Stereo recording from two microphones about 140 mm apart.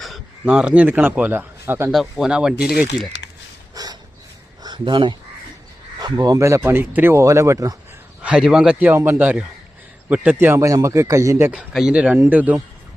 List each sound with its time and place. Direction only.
0.0 s a man's voice: 5° right (ahead or behind)
1.9 s speech: centre (ahead or behind)
3.8 s snort: 25° right (ahead or behind)
4.6 s speech: 35° right (ahead or behind)
8.2 s a man's voice: 5° right (ahead or behind)
11.5 s a man's voice: 5° right (ahead or behind)